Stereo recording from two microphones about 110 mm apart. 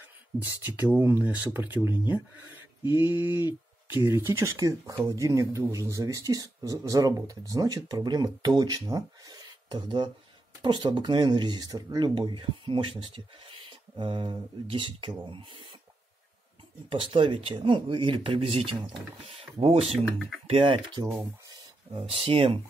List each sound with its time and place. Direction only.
0.4 s speech: 15° right (ahead or behind)
2.8 s a sound: 40° left (ahead or behind)
3.1 s a sound: 20° right (ahead or behind)
3.8 s speech: 20° right (ahead or behind); by 15.6 s 50° right (ahead or behind)
16.9 s speech: 50° right (ahead or behind)
19.8 s speech: centre (ahead or behind)
20.4 s speech: 60° right (ahead or behind)
22.0 s speech: 60° right (ahead or behind)